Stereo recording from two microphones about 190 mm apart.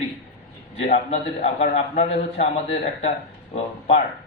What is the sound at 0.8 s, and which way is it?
A man's voice, 35° left (ahead or behind).